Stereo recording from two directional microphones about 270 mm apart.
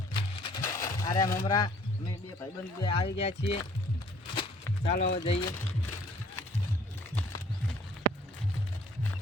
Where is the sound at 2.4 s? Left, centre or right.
Centre.